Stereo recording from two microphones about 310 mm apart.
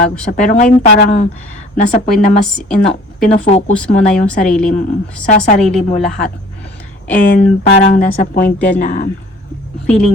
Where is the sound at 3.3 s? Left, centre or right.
Centre.